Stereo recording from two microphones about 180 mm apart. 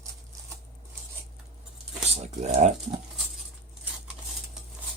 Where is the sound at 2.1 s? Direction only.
40° right (ahead or behind).